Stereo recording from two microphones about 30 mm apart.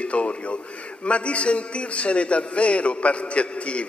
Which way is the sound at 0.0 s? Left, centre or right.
Left.